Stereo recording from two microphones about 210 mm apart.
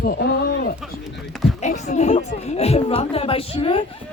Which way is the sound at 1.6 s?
35° left (ahead or behind).